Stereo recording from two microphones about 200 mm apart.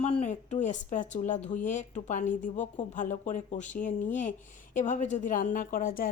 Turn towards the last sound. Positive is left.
turn(degrees=45)  # may be behind; listen again after turning